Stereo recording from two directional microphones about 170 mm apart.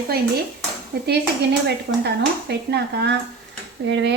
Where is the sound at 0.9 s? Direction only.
70° right (ahead or behind).